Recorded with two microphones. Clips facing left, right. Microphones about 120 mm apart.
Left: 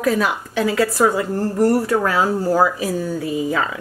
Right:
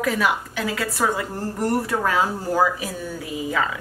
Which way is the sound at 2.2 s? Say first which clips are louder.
Left 4 dB; 40° left (ahead or behind).